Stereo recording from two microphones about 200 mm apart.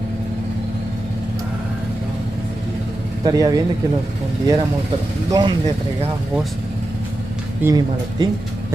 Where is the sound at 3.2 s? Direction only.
20° right (ahead or behind).